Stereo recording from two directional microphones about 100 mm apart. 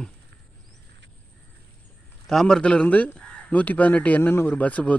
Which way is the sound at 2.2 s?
5° left (ahead or behind).